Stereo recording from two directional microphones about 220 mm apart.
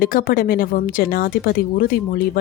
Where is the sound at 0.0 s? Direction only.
40° left (ahead or behind).